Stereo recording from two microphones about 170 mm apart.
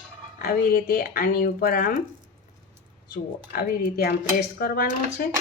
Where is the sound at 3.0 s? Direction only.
65° left (ahead or behind).